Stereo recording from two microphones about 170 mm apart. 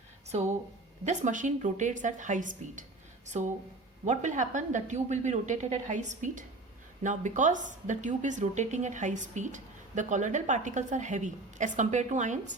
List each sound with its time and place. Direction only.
0.3 s a woman's voice: 40° right (ahead or behind)